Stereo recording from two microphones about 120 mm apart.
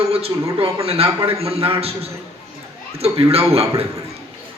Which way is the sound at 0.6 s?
55° right (ahead or behind).